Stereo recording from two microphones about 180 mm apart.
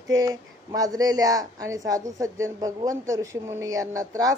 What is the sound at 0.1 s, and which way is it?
Speech, 20° right (ahead or behind).